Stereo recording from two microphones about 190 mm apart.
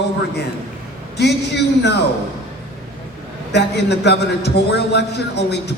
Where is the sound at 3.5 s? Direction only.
60° left (ahead or behind).